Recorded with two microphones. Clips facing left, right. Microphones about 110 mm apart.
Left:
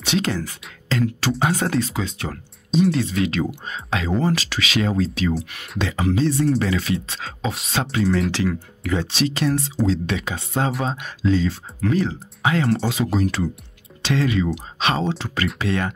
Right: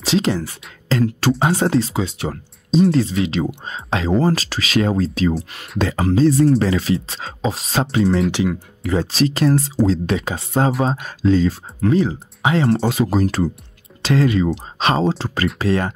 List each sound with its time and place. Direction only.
0.0 s speech: 30° right (ahead or behind)
2.7 s speech: 35° right (ahead or behind)
8.3 s speech: 20° right (ahead or behind)
8.9 s speech: 40° right (ahead or behind)
11.8 s speech: 25° right (ahead or behind)
13.1 s speech: 40° right (ahead or behind)